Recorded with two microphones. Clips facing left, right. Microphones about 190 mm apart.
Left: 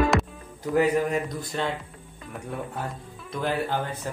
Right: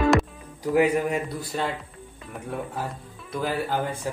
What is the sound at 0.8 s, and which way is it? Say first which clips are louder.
Speech: even; 5° right (ahead or behind).